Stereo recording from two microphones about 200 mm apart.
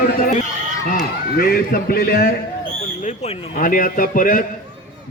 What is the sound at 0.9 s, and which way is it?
Speech, 45° left (ahead or behind).